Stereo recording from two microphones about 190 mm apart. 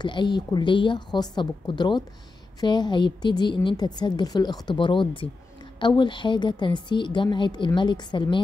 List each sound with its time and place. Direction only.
0.0 s a woman's voice: 25° left (ahead or behind)